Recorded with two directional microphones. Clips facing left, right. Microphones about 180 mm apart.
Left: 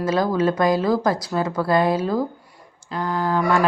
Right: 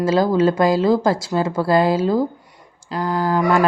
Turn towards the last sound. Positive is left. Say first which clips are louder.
# right 3 dB
turn(degrees=-35)  # may be behind; listen again after turning